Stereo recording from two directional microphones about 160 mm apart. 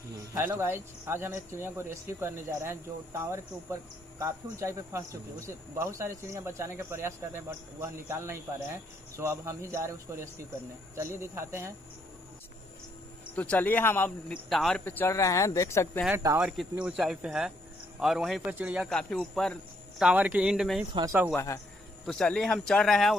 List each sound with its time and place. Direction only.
0.3 s speech: 15° right (ahead or behind)
13.3 s speech: 10° left (ahead or behind)
14.5 s speech: centre (ahead or behind)
14.8 s speech: 15° left (ahead or behind)
16.1 s speech: 15° right (ahead or behind)
16.5 s speech: 5° right (ahead or behind)
18.9 s speech: 5° left (ahead or behind)
21.3 s speech: 20° left (ahead or behind)
22.0 s speech: 5° left (ahead or behind)